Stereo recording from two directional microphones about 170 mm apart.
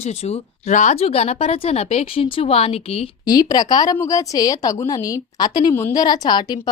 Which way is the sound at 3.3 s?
25° left (ahead or behind).